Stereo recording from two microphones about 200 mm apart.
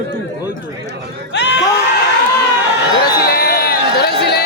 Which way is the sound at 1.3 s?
60° left (ahead or behind).